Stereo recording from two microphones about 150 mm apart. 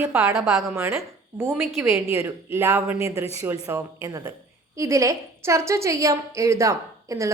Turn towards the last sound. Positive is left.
turn(degrees=-20)  # may be behind; listen again after turning